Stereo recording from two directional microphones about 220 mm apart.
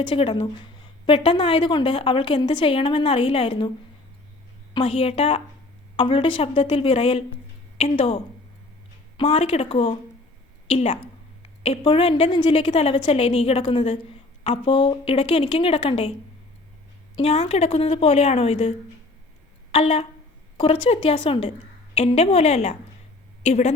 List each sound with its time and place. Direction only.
0.1 s a woman's voice: 25° left (ahead or behind)
4.7 s a woman's voice: 25° left (ahead or behind)
17.2 s a woman's voice: 25° left (ahead or behind)
19.7 s a woman's voice: 25° left (ahead or behind)